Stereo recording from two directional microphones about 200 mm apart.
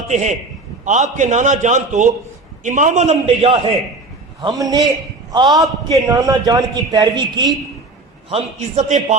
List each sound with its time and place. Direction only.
0.1 s a man's voice: 35° right (ahead or behind); by 7.4 s 20° right (ahead or behind)
8.3 s a man's voice: 35° right (ahead or behind)